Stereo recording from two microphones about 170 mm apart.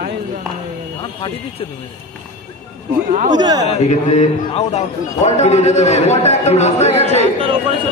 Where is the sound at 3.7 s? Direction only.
40° left (ahead or behind).